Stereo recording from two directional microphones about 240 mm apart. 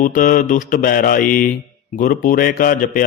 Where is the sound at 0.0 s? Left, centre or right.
Left.